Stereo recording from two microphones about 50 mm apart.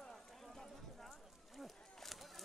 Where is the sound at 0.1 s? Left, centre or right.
Centre.